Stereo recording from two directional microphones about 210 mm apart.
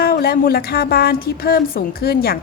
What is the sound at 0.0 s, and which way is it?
A woman's voice, 45° left (ahead or behind).